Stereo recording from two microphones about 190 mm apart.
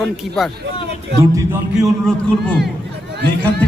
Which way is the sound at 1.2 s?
15° right (ahead or behind).